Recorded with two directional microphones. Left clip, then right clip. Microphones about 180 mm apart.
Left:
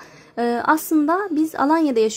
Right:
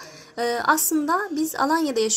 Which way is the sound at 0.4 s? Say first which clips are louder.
Left 2 dB; 50° left (ahead or behind).